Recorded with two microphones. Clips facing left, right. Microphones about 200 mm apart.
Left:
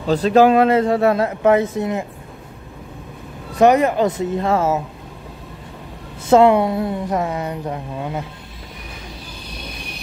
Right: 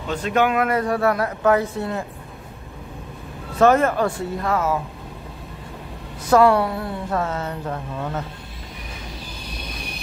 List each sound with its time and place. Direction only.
0.0 s speech: 35° left (ahead or behind); by 2.0 s 20° left (ahead or behind)
3.5 s speech: 15° left (ahead or behind)
6.2 s speech: 25° left (ahead or behind)